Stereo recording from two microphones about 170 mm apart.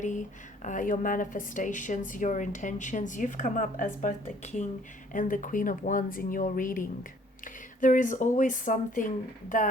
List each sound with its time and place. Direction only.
0.0 s speech: 45° left (ahead or behind)